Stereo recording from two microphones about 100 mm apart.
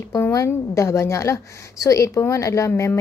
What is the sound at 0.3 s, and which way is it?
A woman's voice, 30° left (ahead or behind).